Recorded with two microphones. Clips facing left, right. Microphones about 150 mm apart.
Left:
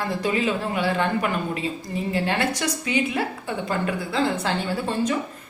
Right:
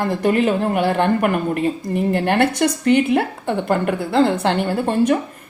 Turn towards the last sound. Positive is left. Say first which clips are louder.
# right 7 dB
turn(degrees=-60)  # may be behind; listen again after turning